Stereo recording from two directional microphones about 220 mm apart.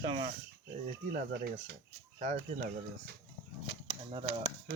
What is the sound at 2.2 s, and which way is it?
Speech, 35° right (ahead or behind).